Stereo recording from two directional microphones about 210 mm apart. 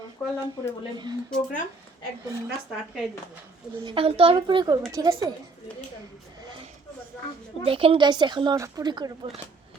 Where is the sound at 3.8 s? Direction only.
25° right (ahead or behind).